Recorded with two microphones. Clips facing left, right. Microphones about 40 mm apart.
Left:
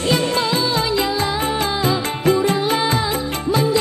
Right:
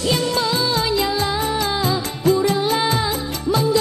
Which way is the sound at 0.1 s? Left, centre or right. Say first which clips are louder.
Left 2 dB; left.